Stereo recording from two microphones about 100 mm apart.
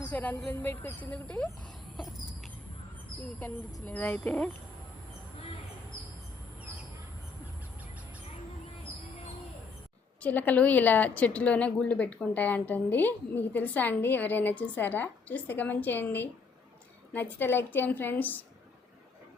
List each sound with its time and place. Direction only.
0.1 s a sound: 15° left (ahead or behind)
0.4 s a woman's voice: 20° left (ahead or behind)
3.8 s a woman's voice: 15° left (ahead or behind)
10.2 s a woman's voice: 15° left (ahead or behind)